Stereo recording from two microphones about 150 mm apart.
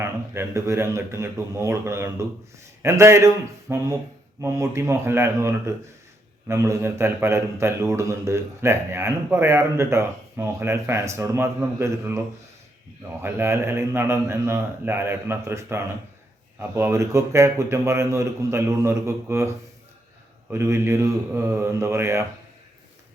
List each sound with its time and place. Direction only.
0.0 s a man's voice: 15° right (ahead or behind)
13.2 s a man's voice: 15° right (ahead or behind)